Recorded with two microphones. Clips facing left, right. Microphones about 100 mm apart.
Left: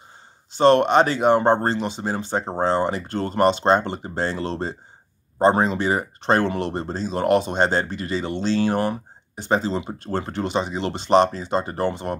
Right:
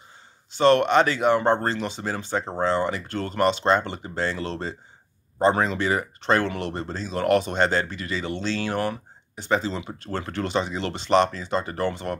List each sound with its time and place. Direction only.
0.5 s speech: 25° left (ahead or behind)